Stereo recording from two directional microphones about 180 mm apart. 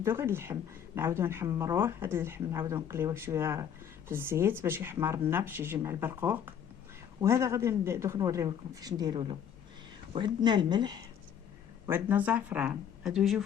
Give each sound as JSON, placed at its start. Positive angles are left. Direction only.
{"t": 0.0, "sound": "speech", "side_deg": -15}
{"t": 11.9, "sound": "speech", "side_deg": -10}